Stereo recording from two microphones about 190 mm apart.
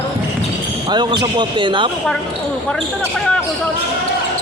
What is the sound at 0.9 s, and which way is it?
Speech, 25° right (ahead or behind).